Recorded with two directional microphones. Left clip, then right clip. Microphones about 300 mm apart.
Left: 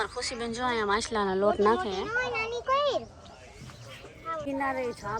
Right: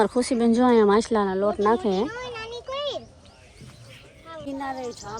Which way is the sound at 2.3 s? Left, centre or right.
Left.